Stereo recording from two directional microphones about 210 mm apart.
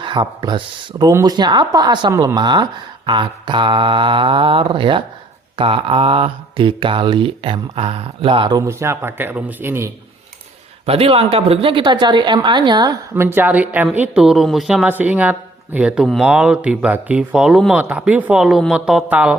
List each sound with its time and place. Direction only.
0.0 s speech: 20° right (ahead or behind)
10.8 s a woman's voice: 30° right (ahead or behind); by 19.4 s 5° right (ahead or behind)